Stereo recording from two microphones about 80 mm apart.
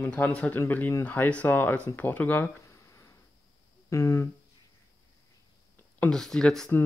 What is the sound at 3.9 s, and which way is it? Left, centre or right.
Speech, left.